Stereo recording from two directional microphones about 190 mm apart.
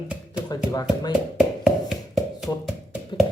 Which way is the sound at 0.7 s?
20° left (ahead or behind).